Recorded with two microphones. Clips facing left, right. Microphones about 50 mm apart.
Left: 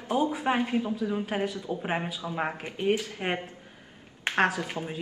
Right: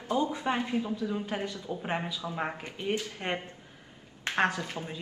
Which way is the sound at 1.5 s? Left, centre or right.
Left.